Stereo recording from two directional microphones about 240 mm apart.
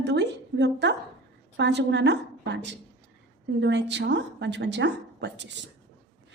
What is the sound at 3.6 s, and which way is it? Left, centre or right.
A woman's voice, right.